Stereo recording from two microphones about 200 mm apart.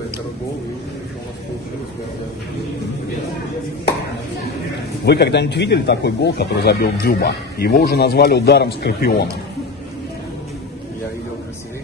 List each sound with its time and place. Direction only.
5.0 s speech: 55° left (ahead or behind)